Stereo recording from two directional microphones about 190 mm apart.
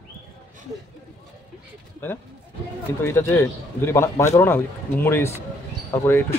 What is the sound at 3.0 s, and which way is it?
Speech, 15° left (ahead or behind).